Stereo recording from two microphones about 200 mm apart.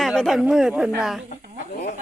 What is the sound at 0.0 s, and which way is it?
Speech, centre (ahead or behind).